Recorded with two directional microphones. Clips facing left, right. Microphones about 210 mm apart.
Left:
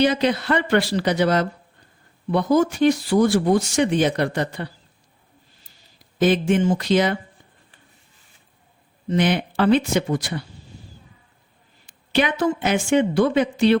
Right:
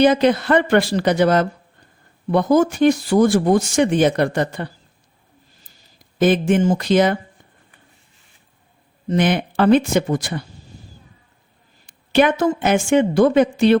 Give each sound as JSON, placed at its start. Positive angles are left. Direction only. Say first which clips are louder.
{"t": 0.0, "sound": "speech", "louder": "right 5 dB", "side_deg": -50}
{"t": 6.1, "sound": "speech", "louder": "right 2 dB", "side_deg": -50}
{"t": 9.0, "sound": "speech", "louder": "right 2 dB", "side_deg": -50}
{"t": 11.9, "sound": "speech", "louder": "right 6 dB", "side_deg": -50}